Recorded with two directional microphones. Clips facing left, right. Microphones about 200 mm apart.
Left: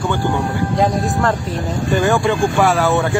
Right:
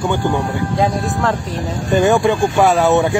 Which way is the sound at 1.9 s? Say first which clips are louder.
Right 3 dB; 20° right (ahead or behind).